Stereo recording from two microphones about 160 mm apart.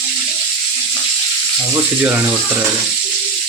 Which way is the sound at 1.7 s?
15° right (ahead or behind).